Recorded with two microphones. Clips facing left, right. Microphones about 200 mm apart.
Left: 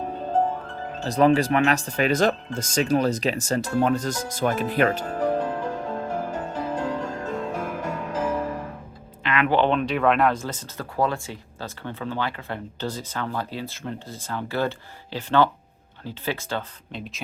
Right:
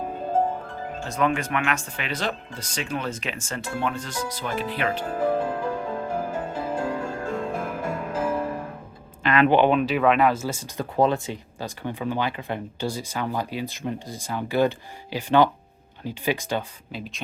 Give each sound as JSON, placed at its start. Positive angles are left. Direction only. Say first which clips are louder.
{"t": 0.3, "sound": "music", "louder": "left 1 dB", "side_deg": -10}
{"t": 1.0, "sound": "speech", "louder": "left 6 dB", "side_deg": 35}
{"t": 5.0, "sound": "music", "louder": "even", "side_deg": -10}
{"t": 9.2, "sound": "a sound", "louder": "right 4 dB", "side_deg": -35}
{"t": 9.5, "sound": "speech", "louder": "left 1 dB", "side_deg": -10}
{"t": 10.9, "sound": "speech", "louder": "right 3 dB", "side_deg": -20}
{"t": 16.9, "sound": "speech", "louder": "even", "side_deg": 0}